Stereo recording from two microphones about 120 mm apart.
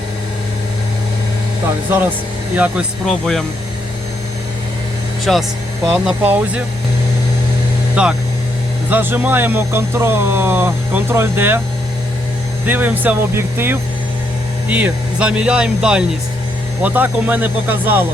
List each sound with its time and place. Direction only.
3.1 s speech: 5° left (ahead or behind)
5.2 s speech: centre (ahead or behind)
6.2 s speech: 15° right (ahead or behind)
8.0 s speech: 10° right (ahead or behind)
12.6 s speech: 15° right (ahead or behind)